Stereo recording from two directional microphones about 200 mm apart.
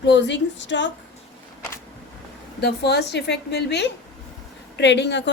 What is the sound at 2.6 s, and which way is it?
Speech, 55° left (ahead or behind).